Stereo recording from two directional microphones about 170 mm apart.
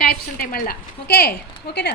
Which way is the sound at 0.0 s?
60° left (ahead or behind).